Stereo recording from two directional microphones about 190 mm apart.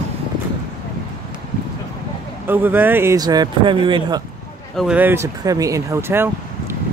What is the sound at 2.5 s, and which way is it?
Speech, 10° right (ahead or behind).